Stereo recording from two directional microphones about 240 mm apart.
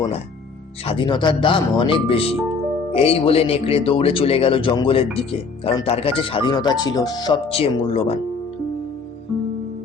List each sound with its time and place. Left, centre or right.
0.9 s speech: centre